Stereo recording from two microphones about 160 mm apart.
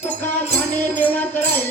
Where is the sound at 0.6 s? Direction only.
10° left (ahead or behind).